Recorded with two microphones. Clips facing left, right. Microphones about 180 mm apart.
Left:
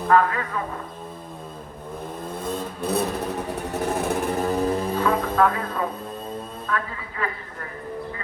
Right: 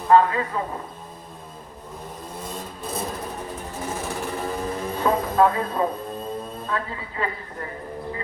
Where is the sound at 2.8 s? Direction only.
65° left (ahead or behind).